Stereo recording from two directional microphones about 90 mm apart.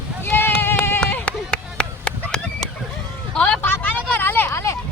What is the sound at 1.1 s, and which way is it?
Run, 20° left (ahead or behind).